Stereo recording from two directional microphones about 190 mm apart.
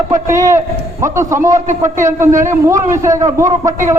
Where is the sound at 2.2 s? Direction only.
40° right (ahead or behind).